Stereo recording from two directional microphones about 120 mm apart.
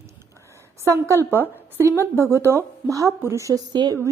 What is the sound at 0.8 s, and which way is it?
A woman's voice, 25° right (ahead or behind).